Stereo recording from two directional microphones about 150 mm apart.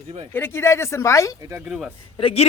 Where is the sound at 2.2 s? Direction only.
35° left (ahead or behind).